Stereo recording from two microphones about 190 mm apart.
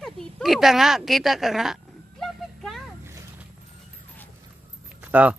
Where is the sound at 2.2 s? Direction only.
Centre (ahead or behind).